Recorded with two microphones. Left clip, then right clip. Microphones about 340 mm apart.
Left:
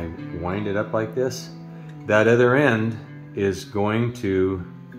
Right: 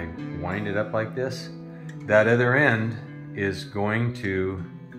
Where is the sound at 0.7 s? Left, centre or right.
Left.